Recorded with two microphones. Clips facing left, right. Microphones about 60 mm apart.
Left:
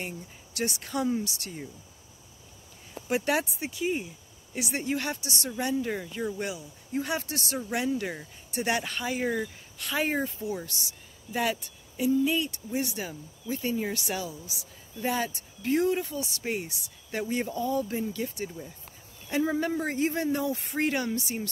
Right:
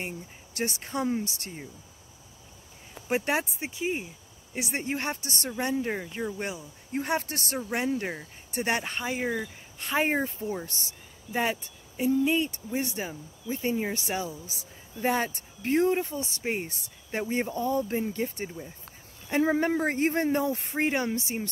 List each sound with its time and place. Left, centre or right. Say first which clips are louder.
0.6 s speech: even; right
3.1 s speech: even; right
4.6 s speech: left 1 dB; right
9.2 s speech: left 2 dB; centre
9.8 s speech: right 2 dB; right
12.0 s speech: right 1 dB; right